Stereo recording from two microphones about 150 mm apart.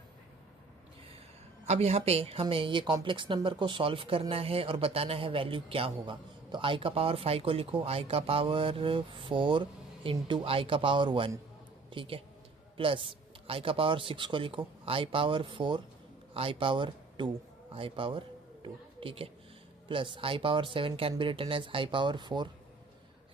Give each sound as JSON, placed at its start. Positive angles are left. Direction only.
{"t": 1.6, "sound": "a woman's voice", "side_deg": -45}